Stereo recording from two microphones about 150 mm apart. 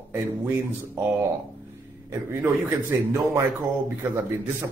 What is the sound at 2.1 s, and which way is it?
A man's voice, 15° right (ahead or behind).